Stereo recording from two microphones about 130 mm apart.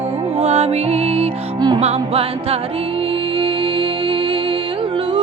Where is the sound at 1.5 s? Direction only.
35° right (ahead or behind).